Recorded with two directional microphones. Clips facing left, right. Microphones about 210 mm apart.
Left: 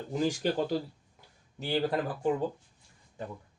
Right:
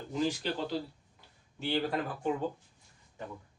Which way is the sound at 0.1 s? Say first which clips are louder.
Left 3 dB; 45° left (ahead or behind).